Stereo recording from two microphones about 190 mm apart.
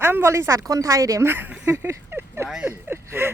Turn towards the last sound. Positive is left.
turn(degrees=-10)  # may be behind; listen again after turning